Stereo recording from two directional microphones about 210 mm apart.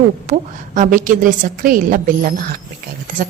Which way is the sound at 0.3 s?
40° right (ahead or behind).